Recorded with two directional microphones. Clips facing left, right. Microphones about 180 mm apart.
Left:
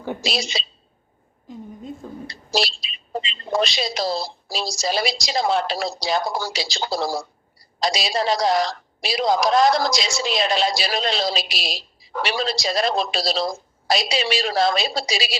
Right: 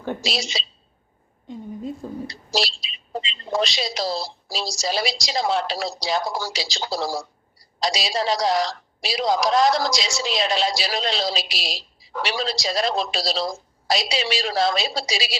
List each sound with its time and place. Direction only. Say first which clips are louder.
0.2 s a woman's voice: left 2 dB; 55° left (ahead or behind)
2.2 s a woman's voice: left 3 dB; 55° left (ahead or behind)